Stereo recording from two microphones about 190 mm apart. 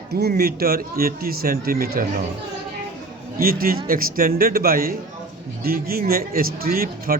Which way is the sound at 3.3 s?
50° right (ahead or behind).